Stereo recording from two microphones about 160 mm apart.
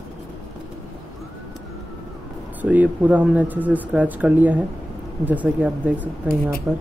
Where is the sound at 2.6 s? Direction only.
10° right (ahead or behind).